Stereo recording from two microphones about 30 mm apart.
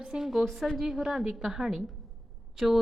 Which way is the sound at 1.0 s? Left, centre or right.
Centre.